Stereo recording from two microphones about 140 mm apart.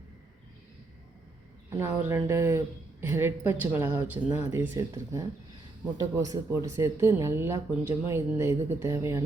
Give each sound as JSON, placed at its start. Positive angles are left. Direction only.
{"t": 1.7, "sound": "speech", "side_deg": -20}